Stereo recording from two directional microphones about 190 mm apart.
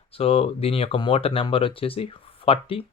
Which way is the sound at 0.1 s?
30° left (ahead or behind).